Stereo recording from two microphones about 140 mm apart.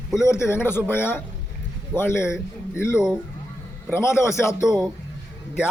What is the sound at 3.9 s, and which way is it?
Speech, 20° left (ahead or behind).